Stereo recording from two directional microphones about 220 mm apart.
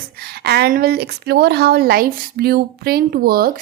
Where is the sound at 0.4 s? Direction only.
45° right (ahead or behind).